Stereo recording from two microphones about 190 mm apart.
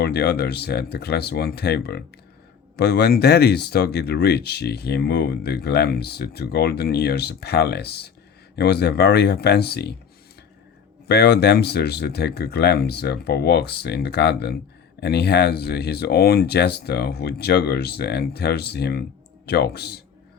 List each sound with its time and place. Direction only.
0.0 s speech: 60° left (ahead or behind)
11.1 s speech: 60° left (ahead or behind)